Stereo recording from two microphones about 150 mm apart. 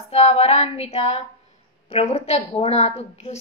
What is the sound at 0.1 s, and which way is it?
A woman's voice, 45° left (ahead or behind).